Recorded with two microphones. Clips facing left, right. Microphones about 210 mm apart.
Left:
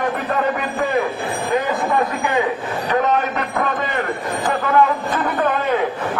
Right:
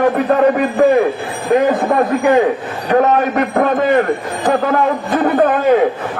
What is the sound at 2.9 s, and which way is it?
A man's voice, 50° right (ahead or behind).